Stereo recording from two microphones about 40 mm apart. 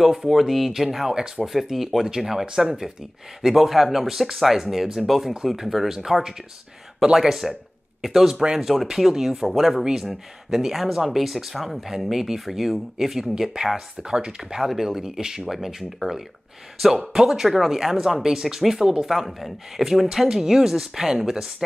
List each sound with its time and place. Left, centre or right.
0.0 s speech: centre
8.4 s speech: centre
8.6 s speech: centre
14.6 s speech: centre
16.8 s speech: centre